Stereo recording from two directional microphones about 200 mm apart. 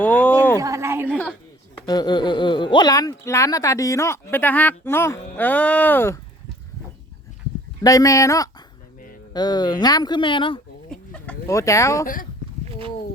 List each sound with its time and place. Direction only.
0.0 s speech: 5° left (ahead or behind)
0.5 s a sound: 15° right (ahead or behind)
1.9 s speech: 20° left (ahead or behind)
7.8 s speech: 15° left (ahead or behind)
10.9 s chicken: 5° left (ahead or behind)